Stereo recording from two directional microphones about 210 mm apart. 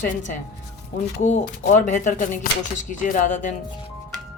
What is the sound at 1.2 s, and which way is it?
Speech, 35° left (ahead or behind).